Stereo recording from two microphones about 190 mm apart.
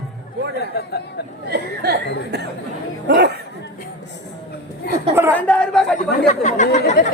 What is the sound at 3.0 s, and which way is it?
Chatter, 60° right (ahead or behind).